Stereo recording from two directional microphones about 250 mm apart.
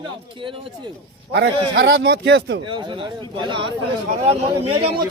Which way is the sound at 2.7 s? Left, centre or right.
Centre.